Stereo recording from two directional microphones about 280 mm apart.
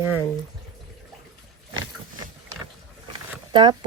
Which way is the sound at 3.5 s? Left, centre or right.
Centre.